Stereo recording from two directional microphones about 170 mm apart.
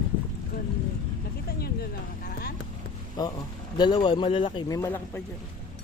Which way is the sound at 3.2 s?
25° left (ahead or behind).